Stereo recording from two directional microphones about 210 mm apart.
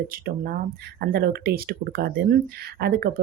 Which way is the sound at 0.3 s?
45° right (ahead or behind).